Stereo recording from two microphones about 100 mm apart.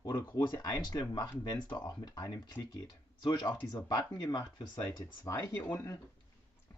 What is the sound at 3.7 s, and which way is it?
Speech, 45° left (ahead or behind).